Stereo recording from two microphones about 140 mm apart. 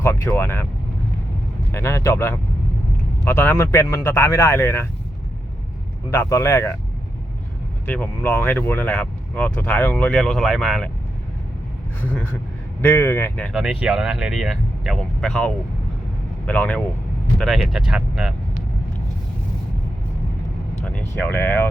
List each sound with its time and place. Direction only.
0.0 s speech: 20° left (ahead or behind)
1.7 s speech: 20° left (ahead or behind)
6.1 s speech: 20° left (ahead or behind)
7.9 s speech: 10° left (ahead or behind)
12.8 s speech: 10° left (ahead or behind)
13.4 s speech: 5° right (ahead or behind)
20.8 s speech: 10° left (ahead or behind)